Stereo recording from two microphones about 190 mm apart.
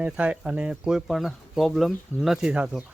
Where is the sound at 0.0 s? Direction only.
5° right (ahead or behind).